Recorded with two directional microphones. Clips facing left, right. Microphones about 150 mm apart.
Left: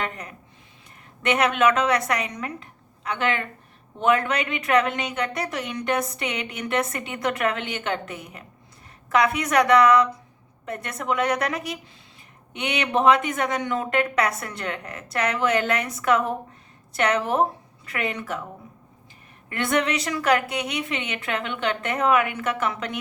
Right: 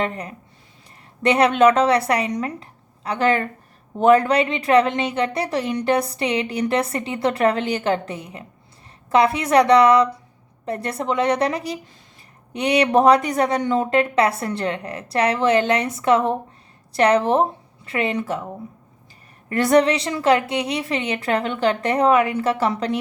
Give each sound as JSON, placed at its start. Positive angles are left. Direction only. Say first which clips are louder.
{"t": 0.0, "sound": "a woman's voice", "louder": "right 6 dB", "side_deg": -30}
{"t": 19.5, "sound": "a woman's voice", "louder": "right 8 dB", "side_deg": -35}